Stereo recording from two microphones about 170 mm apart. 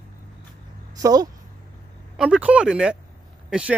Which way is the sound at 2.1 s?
5° right (ahead or behind).